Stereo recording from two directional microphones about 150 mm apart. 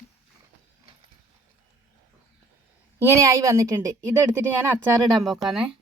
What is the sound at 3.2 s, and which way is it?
Speech, 20° right (ahead or behind).